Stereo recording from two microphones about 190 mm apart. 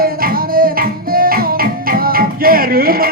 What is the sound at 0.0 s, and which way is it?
Music, 50° right (ahead or behind).